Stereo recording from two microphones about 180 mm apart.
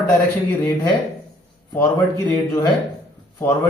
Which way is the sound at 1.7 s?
10° left (ahead or behind).